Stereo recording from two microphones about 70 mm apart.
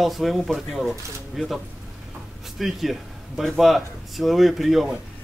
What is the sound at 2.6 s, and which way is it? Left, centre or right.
Speech, centre.